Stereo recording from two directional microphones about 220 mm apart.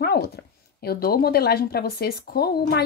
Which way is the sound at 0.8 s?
45° left (ahead or behind).